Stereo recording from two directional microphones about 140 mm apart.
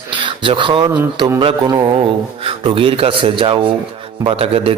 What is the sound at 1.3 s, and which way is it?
A man's voice, 30° right (ahead or behind).